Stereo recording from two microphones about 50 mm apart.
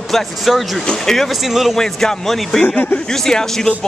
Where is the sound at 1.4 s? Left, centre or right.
Centre.